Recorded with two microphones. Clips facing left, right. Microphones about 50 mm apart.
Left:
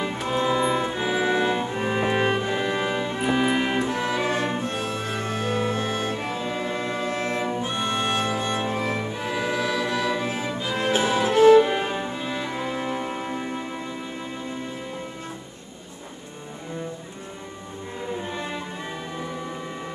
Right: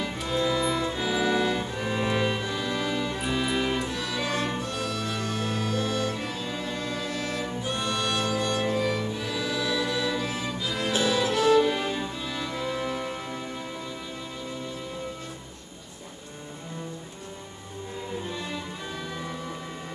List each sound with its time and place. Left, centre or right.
0.0 s music: left
18.3 s music: left